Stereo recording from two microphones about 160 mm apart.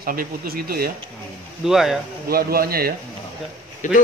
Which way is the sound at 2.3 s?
70° right (ahead or behind).